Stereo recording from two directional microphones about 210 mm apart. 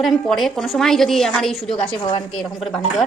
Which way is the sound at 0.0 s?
Centre (ahead or behind).